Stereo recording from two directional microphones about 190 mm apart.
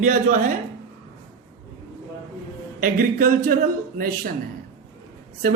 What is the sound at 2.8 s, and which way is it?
Speech, 45° right (ahead or behind).